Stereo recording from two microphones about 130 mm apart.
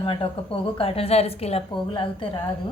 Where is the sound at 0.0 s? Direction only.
45° left (ahead or behind).